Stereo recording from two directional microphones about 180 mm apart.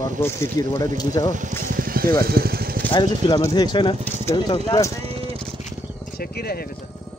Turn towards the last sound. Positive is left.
turn(degrees=60)  # may be behind; listen again after turning